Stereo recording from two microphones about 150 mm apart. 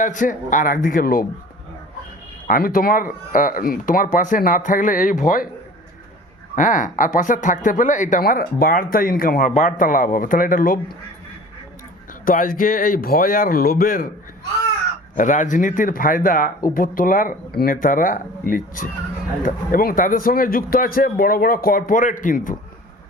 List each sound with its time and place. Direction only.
0.0 s speech: 60° left (ahead or behind)
2.5 s a man's voice: 70° left (ahead or behind)
6.6 s speech: 60° left (ahead or behind)
8.2 s a man's voice: 80° left
12.2 s a man's voice: 70° left (ahead or behind)
15.1 s a man's voice: 60° left (ahead or behind)